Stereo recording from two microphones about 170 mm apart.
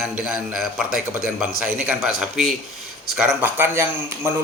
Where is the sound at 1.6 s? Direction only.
10° right (ahead or behind).